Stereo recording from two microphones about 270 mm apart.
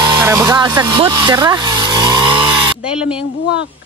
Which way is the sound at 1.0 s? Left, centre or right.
Centre.